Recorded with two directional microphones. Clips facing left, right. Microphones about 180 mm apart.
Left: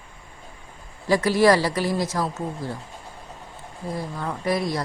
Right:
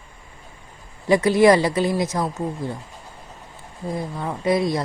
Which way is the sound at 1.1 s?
20° right (ahead or behind).